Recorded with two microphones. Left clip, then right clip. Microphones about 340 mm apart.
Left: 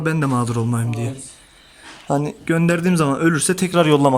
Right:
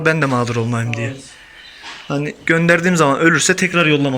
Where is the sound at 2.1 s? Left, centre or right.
Centre.